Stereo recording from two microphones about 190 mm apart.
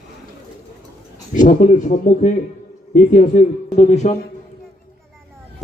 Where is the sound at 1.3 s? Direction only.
40° left (ahead or behind).